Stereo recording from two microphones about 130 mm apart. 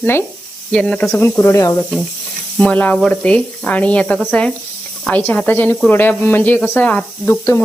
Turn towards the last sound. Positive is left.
turn(degrees=15)  # may be behind; listen again after turning